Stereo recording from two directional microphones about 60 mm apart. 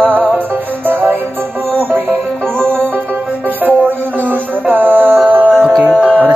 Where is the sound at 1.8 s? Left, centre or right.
Right.